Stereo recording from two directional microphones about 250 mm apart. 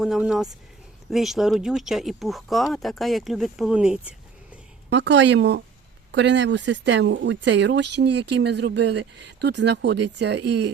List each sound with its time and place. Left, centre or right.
0.0 s speech: centre
4.9 s speech: right